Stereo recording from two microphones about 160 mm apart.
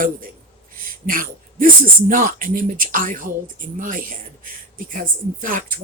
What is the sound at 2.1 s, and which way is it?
Speech, 55° right (ahead or behind).